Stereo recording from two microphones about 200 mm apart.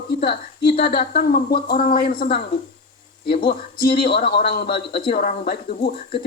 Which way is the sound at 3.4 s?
50° left (ahead or behind).